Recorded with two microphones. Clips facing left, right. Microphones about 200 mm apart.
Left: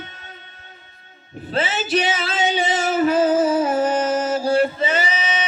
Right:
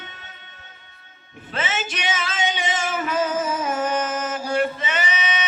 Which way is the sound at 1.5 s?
35° left (ahead or behind).